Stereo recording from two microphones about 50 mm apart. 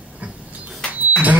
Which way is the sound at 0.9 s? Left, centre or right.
Right.